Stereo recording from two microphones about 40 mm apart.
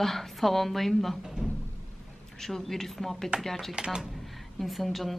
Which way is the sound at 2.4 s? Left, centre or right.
Centre.